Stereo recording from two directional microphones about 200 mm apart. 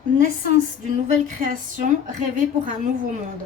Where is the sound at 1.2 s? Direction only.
40° right (ahead or behind).